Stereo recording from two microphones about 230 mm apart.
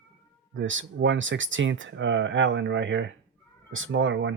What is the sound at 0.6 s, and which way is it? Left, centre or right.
Speech, right.